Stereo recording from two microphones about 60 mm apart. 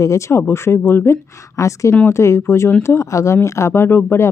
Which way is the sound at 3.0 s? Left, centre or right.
Left.